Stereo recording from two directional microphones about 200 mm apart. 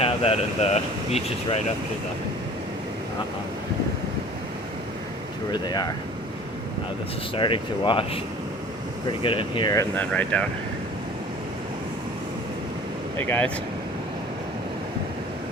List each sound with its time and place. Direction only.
0.0 s speech: 30° left (ahead or behind)
5.5 s speech: 20° left (ahead or behind)
7.3 s speech: 25° left (ahead or behind)
9.9 s speech: 5° left (ahead or behind)
13.1 s speech: 10° left (ahead or behind)